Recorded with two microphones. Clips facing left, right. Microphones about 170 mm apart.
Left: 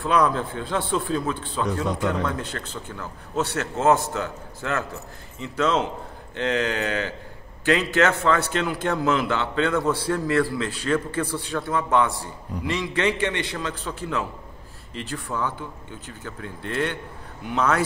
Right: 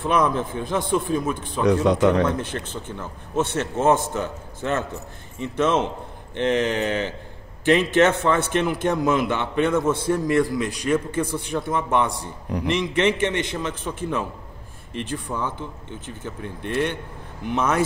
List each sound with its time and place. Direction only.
0.0 s speech: 20° right (ahead or behind)
1.9 s speech: 80° right
2.2 s a man's voice: 20° right (ahead or behind)